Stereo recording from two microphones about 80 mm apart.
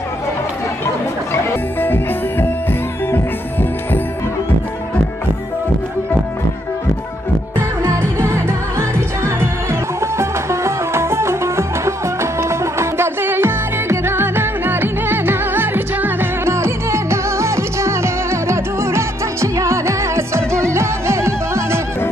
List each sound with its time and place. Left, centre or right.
1.8 s music: left
7.8 s music: right